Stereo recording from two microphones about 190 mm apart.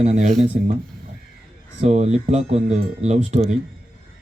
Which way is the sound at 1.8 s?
35° right (ahead or behind).